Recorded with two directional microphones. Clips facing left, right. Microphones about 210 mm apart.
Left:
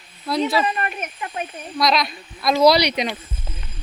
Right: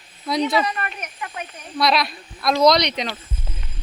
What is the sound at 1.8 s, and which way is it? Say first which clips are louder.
Speech: even; centre (ahead or behind).